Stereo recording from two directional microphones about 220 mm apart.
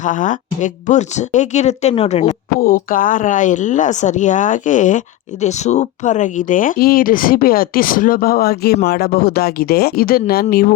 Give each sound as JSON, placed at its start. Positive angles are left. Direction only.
{"t": 0.0, "sound": "speech", "side_deg": 35}